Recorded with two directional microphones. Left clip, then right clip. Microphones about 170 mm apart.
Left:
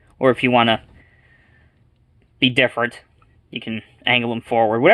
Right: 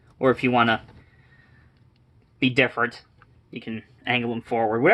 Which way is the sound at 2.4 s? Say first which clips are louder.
Left 4 dB; 35° left (ahead or behind).